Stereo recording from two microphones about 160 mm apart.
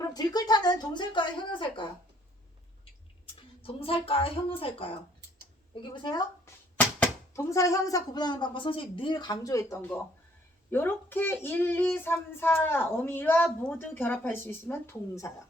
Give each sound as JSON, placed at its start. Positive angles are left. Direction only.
{"t": 0.0, "sound": "a woman's voice", "side_deg": 25}
{"t": 3.6, "sound": "a woman's voice", "side_deg": 35}
{"t": 6.7, "sound": "a woman's voice", "side_deg": 15}